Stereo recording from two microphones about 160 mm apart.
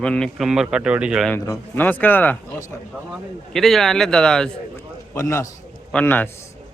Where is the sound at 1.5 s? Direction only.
10° left (ahead or behind).